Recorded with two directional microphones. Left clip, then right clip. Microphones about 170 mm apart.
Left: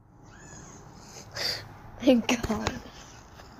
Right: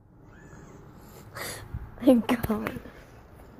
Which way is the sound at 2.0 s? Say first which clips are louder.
Right 1 dB; 15° right (ahead or behind).